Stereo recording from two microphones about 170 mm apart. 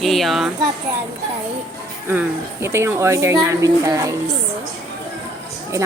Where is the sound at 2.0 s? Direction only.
15° right (ahead or behind).